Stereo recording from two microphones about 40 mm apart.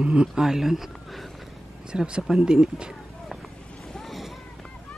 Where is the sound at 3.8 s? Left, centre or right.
Centre.